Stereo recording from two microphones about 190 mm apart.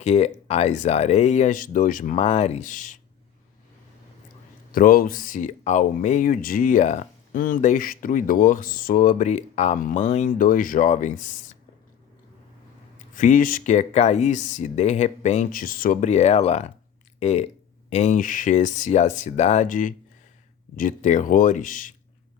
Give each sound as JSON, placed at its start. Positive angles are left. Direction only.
{"t": 0.0, "sound": "speech", "side_deg": 35}
{"t": 2.2, "sound": "speech", "side_deg": 30}
{"t": 4.7, "sound": "speech", "side_deg": 50}
{"t": 13.0, "sound": "speech", "side_deg": 45}